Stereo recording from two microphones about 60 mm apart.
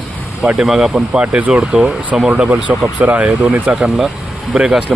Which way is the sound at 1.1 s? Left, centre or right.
Right.